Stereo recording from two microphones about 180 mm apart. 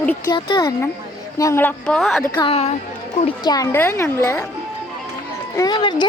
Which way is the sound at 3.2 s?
25° left (ahead or behind).